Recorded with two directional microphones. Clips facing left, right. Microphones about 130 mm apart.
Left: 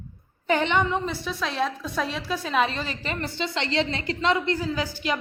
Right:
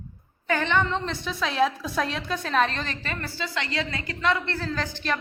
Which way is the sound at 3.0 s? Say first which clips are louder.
Left 3 dB; 20° left (ahead or behind).